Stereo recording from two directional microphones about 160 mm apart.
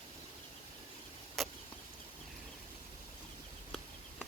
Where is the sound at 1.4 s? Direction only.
Centre (ahead or behind).